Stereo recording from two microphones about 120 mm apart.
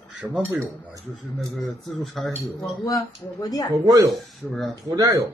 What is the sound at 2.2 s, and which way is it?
Speech, centre (ahead or behind).